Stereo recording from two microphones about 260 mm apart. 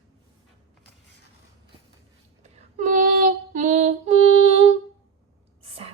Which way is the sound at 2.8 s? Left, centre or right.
Right.